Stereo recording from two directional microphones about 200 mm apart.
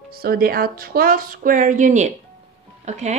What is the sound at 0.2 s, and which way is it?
Speech, 50° right (ahead or behind).